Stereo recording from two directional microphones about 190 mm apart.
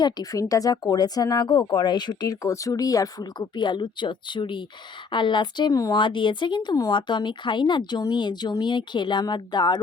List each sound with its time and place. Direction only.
0.0 s speech: 20° left (ahead or behind)